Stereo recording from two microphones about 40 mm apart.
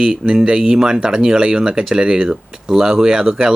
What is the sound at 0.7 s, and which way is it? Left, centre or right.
Speech, centre.